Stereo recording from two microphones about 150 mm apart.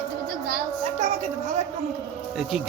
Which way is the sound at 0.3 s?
80° right.